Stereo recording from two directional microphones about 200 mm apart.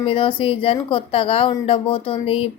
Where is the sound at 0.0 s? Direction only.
25° left (ahead or behind).